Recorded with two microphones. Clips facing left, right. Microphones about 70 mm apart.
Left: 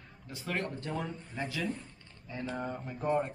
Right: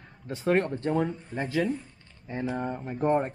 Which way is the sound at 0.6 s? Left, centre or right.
Right.